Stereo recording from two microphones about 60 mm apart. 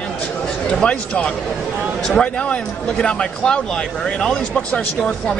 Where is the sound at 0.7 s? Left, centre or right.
Centre.